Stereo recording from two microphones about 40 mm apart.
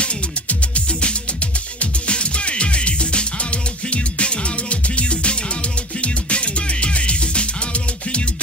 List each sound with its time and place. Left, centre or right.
0.0 s music: left